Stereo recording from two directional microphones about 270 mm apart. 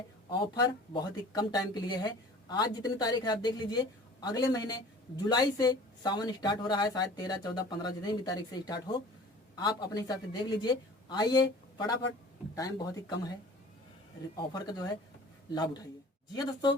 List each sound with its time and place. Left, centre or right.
0.3 s speech: centre
14.6 s speech: centre